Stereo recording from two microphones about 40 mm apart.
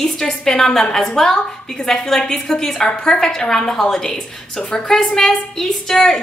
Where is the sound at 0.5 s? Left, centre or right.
Centre.